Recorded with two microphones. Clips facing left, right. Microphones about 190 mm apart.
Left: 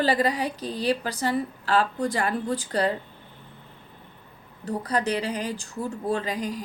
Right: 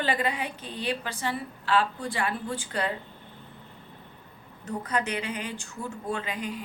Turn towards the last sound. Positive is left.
turn(degrees=40)  # may be behind; listen again after turning